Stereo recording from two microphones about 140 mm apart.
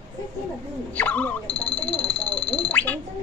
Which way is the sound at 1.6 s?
10° left (ahead or behind).